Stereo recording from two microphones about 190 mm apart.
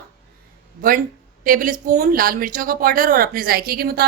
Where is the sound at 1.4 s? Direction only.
45° right (ahead or behind).